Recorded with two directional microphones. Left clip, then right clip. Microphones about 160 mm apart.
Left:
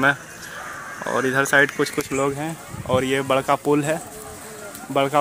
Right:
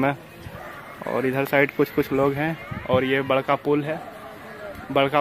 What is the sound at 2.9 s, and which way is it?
Speech, centre (ahead or behind).